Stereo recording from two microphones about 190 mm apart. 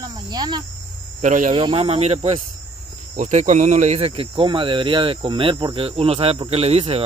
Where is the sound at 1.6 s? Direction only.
30° right (ahead or behind).